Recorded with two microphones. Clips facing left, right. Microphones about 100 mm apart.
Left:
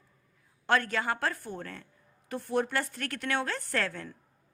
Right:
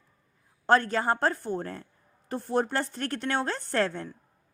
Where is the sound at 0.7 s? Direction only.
35° right (ahead or behind).